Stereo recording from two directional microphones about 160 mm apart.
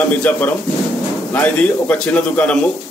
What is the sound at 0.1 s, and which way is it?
A man's voice, 10° left (ahead or behind).